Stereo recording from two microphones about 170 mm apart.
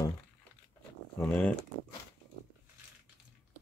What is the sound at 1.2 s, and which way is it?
Speech, 10° left (ahead or behind).